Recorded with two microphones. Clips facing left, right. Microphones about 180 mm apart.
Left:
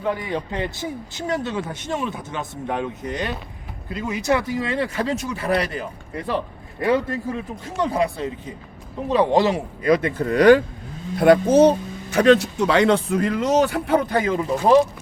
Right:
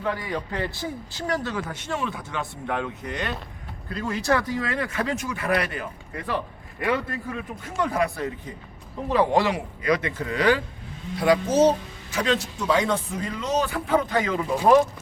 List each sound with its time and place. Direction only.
0.0 s speech: 20° left (ahead or behind)
10.2 s speech: 50° left (ahead or behind); by 14.3 s 65° left (ahead or behind)